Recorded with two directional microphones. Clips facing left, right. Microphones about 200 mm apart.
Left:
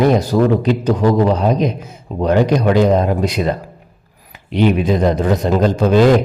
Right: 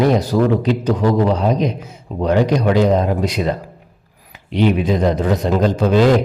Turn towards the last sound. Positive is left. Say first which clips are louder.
# left 2 dB
turn(degrees=45)  # may be behind; listen again after turning